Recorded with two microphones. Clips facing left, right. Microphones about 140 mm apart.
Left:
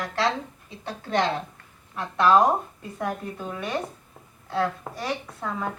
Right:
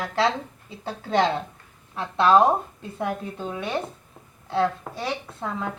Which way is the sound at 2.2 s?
25° right (ahead or behind).